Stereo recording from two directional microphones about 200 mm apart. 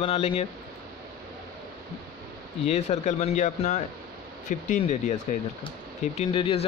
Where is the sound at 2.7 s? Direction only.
35° left (ahead or behind).